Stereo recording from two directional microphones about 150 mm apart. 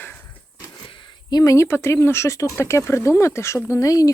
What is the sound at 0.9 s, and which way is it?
Speech, 25° left (ahead or behind).